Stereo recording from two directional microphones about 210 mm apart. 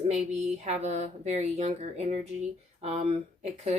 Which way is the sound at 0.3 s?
30° right (ahead or behind).